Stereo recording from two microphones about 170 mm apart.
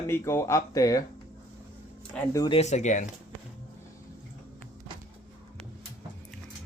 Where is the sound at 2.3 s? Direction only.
25° left (ahead or behind).